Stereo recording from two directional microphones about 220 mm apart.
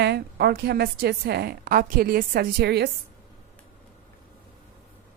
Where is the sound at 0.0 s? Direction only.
50° right (ahead or behind).